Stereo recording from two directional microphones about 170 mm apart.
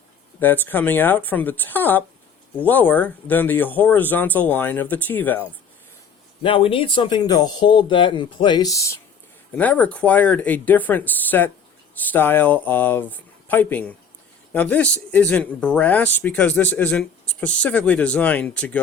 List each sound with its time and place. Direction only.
0.3 s speech: 10° left (ahead or behind)
6.4 s speech: 35° left (ahead or behind); by 18.8 s 10° left (ahead or behind)